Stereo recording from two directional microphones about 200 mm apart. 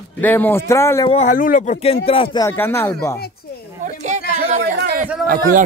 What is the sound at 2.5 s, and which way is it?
Speech, 10° left (ahead or behind).